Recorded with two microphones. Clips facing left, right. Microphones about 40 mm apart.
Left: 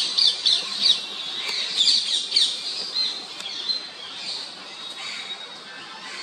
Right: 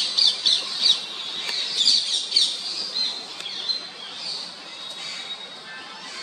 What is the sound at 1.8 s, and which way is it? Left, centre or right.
Bird, left.